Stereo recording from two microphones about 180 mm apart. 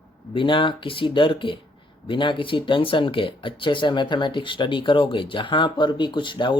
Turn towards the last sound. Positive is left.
turn(degrees=25)  # may be behind; listen again after turning